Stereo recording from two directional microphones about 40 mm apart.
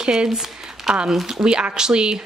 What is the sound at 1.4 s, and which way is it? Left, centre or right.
Speech, right.